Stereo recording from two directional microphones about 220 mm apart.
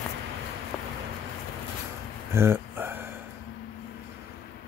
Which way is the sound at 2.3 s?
10° right (ahead or behind).